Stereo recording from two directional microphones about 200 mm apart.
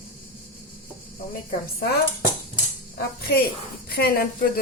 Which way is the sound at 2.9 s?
50° left (ahead or behind).